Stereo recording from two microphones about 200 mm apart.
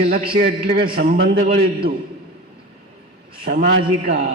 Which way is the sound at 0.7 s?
50° right (ahead or behind).